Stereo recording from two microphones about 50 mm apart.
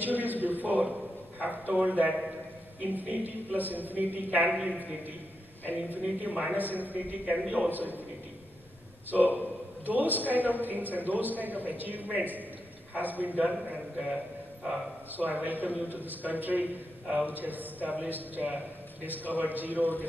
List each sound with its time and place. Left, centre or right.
0.0 s a man's voice: right
5.7 s a woman's voice: right
9.8 s a woman's voice: right
15.1 s a woman's voice: right